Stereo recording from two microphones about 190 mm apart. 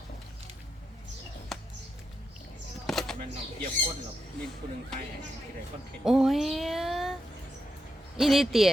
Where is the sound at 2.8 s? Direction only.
Centre (ahead or behind).